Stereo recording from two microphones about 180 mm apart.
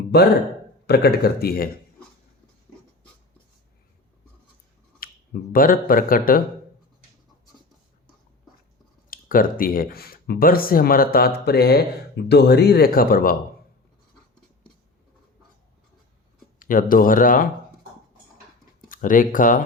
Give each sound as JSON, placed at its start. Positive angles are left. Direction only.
{"t": 0.1, "sound": "speech", "side_deg": 65}
{"t": 4.9, "sound": "speech", "side_deg": 55}
{"t": 9.0, "sound": "speech", "side_deg": 50}
{"t": 16.6, "sound": "speech", "side_deg": 50}
{"t": 18.9, "sound": "speech", "side_deg": 50}